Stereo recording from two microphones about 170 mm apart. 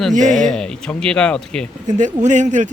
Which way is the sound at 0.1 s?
45° right (ahead or behind).